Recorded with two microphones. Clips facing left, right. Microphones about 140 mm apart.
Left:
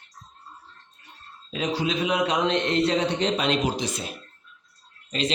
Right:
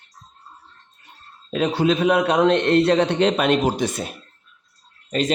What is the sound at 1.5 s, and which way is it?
A man's voice, 60° right (ahead or behind).